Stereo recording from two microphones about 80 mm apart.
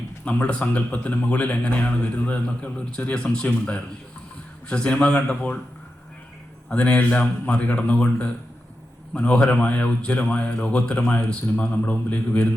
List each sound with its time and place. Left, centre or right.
0.3 s a man's voice: centre
6.7 s a man's voice: centre